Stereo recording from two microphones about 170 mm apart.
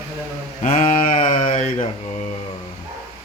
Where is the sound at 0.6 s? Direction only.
45° left (ahead or behind).